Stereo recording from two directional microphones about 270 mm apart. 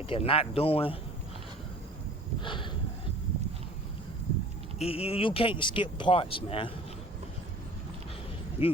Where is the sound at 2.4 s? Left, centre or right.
Centre.